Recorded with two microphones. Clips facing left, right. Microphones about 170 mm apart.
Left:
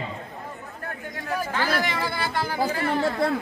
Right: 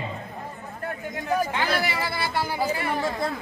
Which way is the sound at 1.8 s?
5° right (ahead or behind).